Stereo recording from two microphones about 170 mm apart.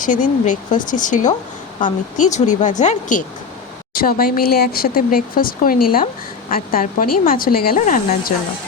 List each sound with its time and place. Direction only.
0.0 s speech: 50° left (ahead or behind)
3.9 s speech: 60° left (ahead or behind)